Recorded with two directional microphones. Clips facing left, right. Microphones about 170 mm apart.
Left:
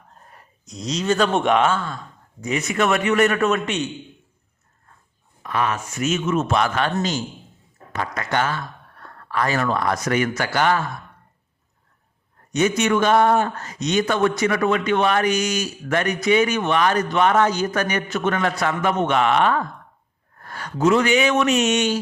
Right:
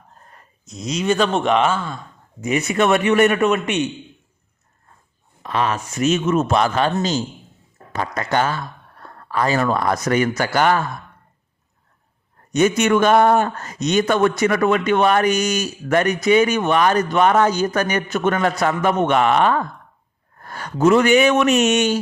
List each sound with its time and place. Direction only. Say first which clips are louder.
0.3 s speech: even; centre (ahead or behind)
1.3 s speech: right 1 dB; centre (ahead or behind)
1.6 s speech: right 1 dB; 10° right (ahead or behind)
2.4 s a man's voice: right 3 dB; 25° right (ahead or behind)
5.4 s speech: right 2 dB; 30° right (ahead or behind)
12.5 s a man's voice: right 3 dB; 50° right (ahead or behind)